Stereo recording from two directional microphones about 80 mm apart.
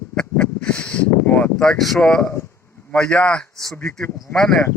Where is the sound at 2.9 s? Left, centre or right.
Centre.